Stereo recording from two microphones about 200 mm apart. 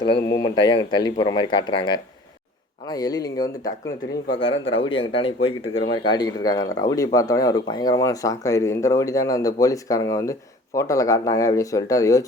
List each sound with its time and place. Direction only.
0.0 s speech: 20° left (ahead or behind)
4.5 s a man's voice: 75° left (ahead or behind)
4.8 s speech: 25° left (ahead or behind)